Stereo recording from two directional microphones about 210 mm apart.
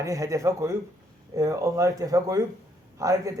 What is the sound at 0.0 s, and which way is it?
Speech, 15° right (ahead or behind).